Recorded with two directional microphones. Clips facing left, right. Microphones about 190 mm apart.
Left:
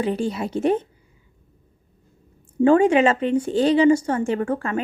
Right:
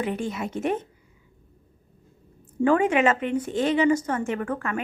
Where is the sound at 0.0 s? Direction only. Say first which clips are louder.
Left 5 dB; 30° left (ahead or behind).